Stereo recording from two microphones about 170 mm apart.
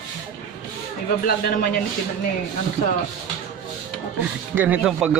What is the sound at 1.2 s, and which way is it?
Speech, 60° left (ahead or behind).